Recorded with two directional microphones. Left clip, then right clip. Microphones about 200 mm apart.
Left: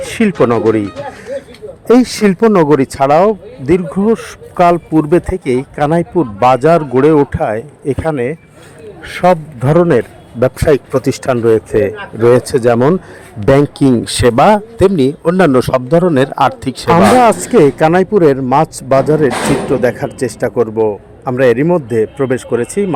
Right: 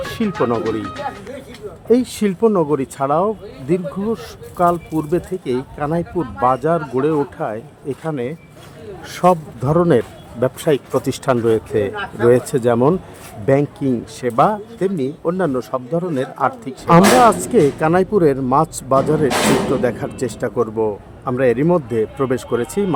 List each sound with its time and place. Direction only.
0.2 s speech: 30° left (ahead or behind)
2.0 s speech: 30° left (ahead or behind)
9.0 s speech: 15° left (ahead or behind)
13.4 s a man's voice: 35° left (ahead or behind)
16.9 s speech: 25° left (ahead or behind)